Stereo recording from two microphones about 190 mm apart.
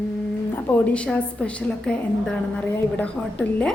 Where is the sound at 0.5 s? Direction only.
10° left (ahead or behind).